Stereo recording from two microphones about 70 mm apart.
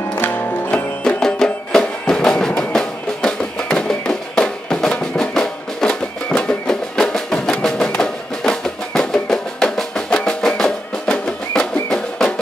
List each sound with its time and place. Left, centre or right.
0.2 s music: left
1.0 s music: centre
11.9 s music: centre